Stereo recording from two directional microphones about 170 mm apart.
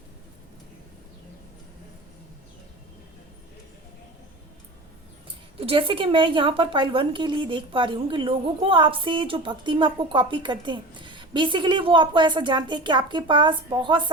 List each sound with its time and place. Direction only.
5.5 s a woman's voice: 35° right (ahead or behind)